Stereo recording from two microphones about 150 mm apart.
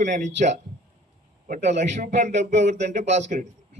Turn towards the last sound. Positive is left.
turn(degrees=-50)  # may be behind; listen again after turning